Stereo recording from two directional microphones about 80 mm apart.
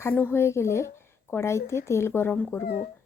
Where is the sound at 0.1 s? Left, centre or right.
Left.